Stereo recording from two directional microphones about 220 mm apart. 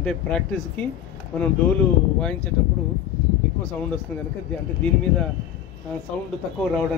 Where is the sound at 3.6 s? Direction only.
5° left (ahead or behind).